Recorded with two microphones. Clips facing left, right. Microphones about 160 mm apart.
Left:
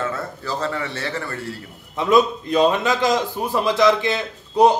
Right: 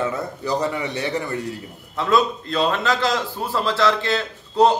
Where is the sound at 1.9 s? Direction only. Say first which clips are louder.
Left 3 dB; 15° left (ahead or behind).